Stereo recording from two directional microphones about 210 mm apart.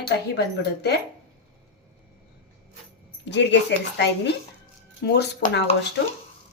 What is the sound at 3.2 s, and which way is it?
Speech, 55° left (ahead or behind).